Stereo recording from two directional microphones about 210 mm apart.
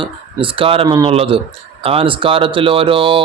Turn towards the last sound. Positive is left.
turn(degrees=-25)  # may be behind; listen again after turning